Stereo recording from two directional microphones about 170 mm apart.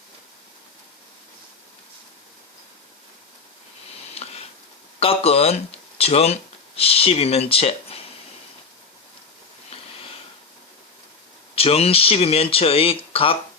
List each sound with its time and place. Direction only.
4.1 s a sound: 35° left (ahead or behind)
4.9 s speech: 35° left (ahead or behind)
11.5 s speech: 35° left (ahead or behind)